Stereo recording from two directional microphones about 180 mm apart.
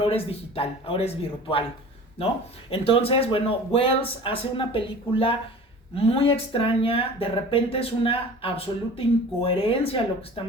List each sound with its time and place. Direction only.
0.0 s speech: 30° left (ahead or behind)
2.6 s speech: 30° left (ahead or behind)